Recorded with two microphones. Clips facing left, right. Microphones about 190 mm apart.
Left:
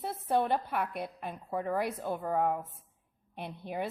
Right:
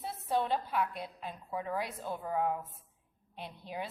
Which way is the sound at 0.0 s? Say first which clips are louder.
Left 3 dB; 55° left (ahead or behind).